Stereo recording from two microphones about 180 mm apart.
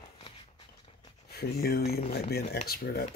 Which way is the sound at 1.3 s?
60° left (ahead or behind).